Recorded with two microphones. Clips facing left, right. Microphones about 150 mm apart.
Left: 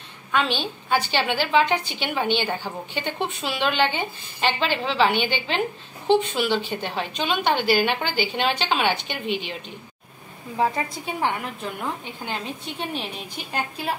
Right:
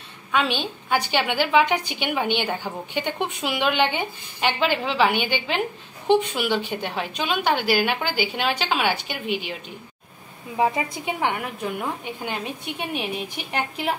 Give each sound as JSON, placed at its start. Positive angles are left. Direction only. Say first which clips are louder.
{"t": 0.3, "sound": "a woman's voice", "louder": "even", "side_deg": -10}
{"t": 10.6, "sound": "a woman's voice", "louder": "right 1 dB", "side_deg": -20}